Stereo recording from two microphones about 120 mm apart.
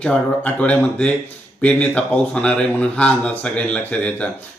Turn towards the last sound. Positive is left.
turn(degrees=10)  # may be behind; listen again after turning